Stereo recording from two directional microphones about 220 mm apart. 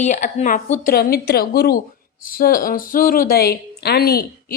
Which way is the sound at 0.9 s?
45° left (ahead or behind).